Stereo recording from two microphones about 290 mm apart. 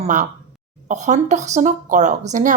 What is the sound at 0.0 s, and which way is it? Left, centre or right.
A woman's voice, right.